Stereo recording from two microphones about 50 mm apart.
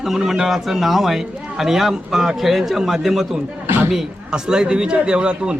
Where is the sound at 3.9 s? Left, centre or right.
Centre.